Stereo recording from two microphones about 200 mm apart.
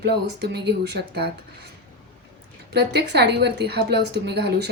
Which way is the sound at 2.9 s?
55° right (ahead or behind).